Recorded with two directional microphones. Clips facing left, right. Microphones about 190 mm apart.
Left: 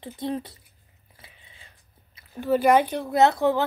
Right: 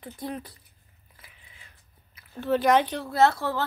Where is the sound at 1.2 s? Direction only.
25° left (ahead or behind).